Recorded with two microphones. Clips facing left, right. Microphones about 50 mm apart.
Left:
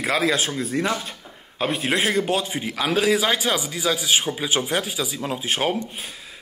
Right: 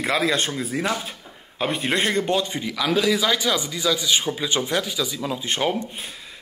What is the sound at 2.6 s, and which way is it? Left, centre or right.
A man's voice, left.